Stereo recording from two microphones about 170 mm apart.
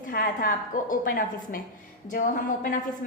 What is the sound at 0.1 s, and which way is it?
A woman's voice, 55° left (ahead or behind).